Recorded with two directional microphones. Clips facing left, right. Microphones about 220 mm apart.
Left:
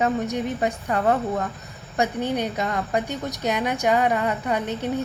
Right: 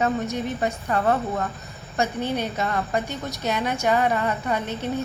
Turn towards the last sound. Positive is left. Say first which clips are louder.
# left 1 dB
turn(degrees=15)  # may be behind; listen again after turning